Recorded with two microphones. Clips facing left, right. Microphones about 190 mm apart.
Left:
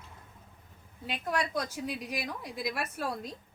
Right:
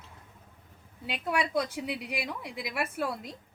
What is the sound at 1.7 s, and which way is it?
A woman's voice, 65° right (ahead or behind).